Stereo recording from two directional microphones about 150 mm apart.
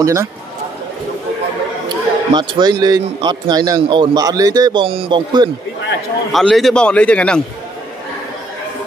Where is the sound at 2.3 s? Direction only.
30° right (ahead or behind).